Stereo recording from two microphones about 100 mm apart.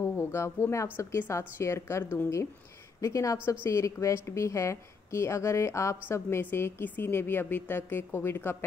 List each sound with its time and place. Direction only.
0.1 s a woman's voice: 25° left (ahead or behind)